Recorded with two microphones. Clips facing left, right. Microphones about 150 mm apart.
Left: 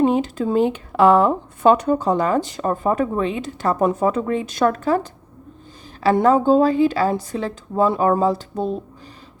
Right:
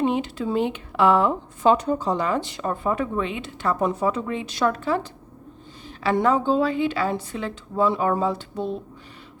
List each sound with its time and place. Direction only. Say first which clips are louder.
0.0 s speech: left 5 dB; 45° left (ahead or behind)
1.7 s a woman's voice: left 4 dB; 60° left (ahead or behind); by 8.7 s 40° left (ahead or behind)